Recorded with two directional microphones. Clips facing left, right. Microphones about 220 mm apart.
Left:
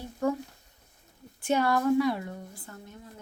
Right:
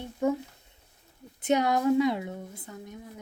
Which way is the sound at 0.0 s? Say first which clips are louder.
Right 2 dB; 20° right (ahead or behind).